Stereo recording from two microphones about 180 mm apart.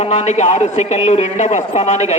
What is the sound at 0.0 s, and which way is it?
A man's voice, 40° left (ahead or behind).